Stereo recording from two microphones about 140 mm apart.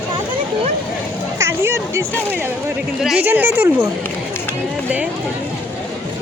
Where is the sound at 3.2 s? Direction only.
15° right (ahead or behind).